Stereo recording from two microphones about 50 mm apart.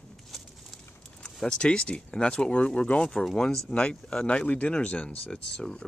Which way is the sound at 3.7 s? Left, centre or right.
Left.